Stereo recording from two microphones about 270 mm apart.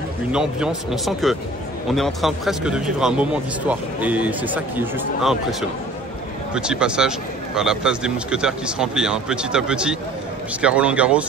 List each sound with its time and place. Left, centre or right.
0.3 s speech: centre